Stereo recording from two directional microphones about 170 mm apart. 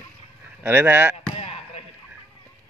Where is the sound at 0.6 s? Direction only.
10° right (ahead or behind).